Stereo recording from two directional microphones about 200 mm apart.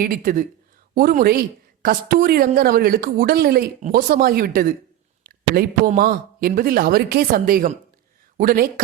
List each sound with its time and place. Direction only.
0.0 s a woman's voice: 45° right (ahead or behind)
5.2 s a sound: 45° right (ahead or behind)
6.0 s a woman's voice: 45° right (ahead or behind)